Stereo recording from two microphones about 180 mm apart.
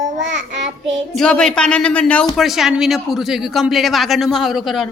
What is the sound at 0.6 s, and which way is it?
Child singing, 40° right (ahead or behind).